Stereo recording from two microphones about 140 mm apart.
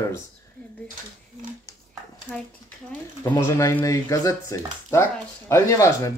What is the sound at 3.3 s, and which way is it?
Speech, 20° left (ahead or behind).